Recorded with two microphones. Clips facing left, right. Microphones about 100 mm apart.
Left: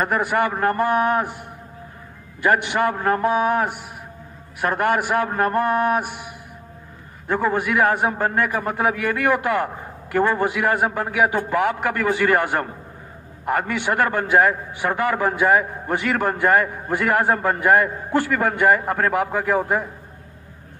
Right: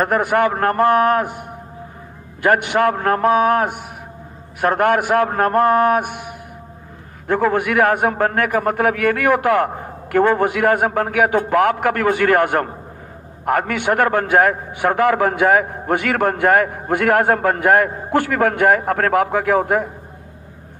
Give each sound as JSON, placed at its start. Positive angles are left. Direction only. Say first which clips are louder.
{"t": 0.0, "sound": "a man's voice", "louder": "right 4 dB", "side_deg": -50}